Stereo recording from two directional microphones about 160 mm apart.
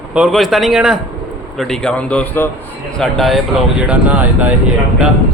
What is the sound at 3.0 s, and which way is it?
Speech, centre (ahead or behind).